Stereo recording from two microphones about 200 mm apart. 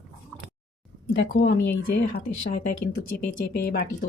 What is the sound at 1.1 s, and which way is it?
Speech, 60° left (ahead or behind).